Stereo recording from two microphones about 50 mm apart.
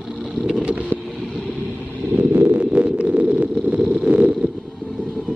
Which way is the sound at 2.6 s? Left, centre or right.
Right.